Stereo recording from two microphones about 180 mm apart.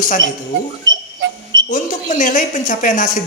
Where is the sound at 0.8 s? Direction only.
90° right.